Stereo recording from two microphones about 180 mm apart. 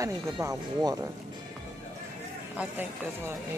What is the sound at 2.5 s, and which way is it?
Speech, 10° right (ahead or behind).